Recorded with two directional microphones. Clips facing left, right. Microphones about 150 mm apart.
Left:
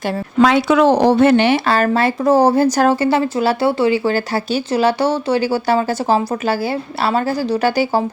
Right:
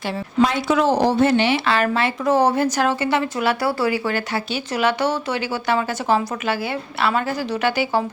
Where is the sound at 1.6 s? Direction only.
40° left (ahead or behind).